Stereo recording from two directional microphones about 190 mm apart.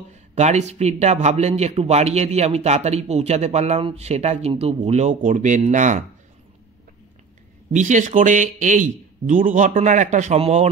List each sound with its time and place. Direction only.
0.1 s speech: 35° right (ahead or behind)
7.7 s speech: 40° right (ahead or behind)